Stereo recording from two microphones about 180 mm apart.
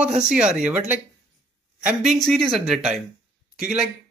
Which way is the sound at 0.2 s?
5° right (ahead or behind).